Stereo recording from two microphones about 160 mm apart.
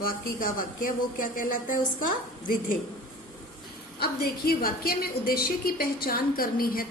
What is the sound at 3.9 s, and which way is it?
A woman's voice, 75° left (ahead or behind).